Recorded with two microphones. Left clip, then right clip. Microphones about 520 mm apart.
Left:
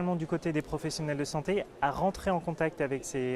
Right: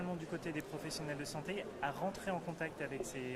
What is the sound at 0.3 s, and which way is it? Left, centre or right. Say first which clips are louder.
Speech: left 10 dB; left.